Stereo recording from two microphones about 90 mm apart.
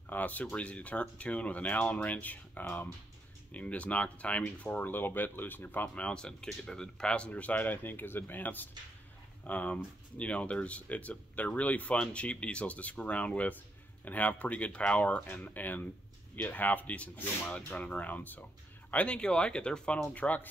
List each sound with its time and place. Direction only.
0.1 s speech: 20° left (ahead or behind)